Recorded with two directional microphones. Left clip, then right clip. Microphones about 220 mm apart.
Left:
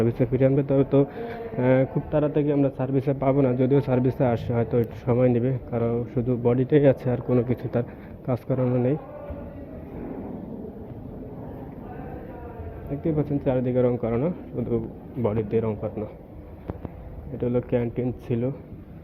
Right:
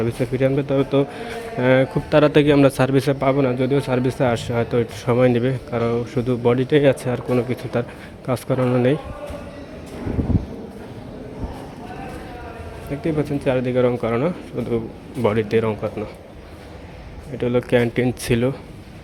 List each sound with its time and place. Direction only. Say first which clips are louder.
0.0 s a man's voice: right 2 dB; 10° right (ahead or behind)
2.0 s a man's voice: right 9 dB; 35° right (ahead or behind)
12.9 s speech: right 4 dB; 20° right (ahead or behind)
17.3 s speech: right 6 dB; 20° right (ahead or behind)